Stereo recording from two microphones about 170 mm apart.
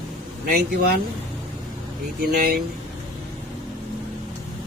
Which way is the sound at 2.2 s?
65° right (ahead or behind).